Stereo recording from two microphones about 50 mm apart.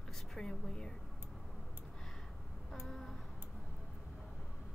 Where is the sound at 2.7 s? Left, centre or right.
Centre.